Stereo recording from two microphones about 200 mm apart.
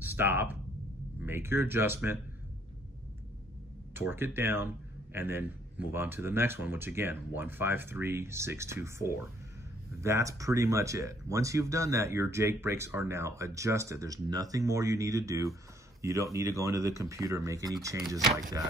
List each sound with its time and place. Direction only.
0.0 s speech: 10° right (ahead or behind)
3.9 s speech: 10° right (ahead or behind)